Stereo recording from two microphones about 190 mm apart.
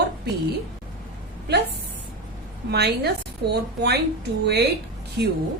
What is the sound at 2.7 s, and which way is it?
A woman's voice, 60° right (ahead or behind).